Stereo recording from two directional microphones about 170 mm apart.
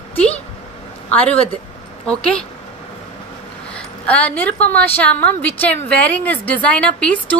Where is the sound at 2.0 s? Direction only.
5° left (ahead or behind).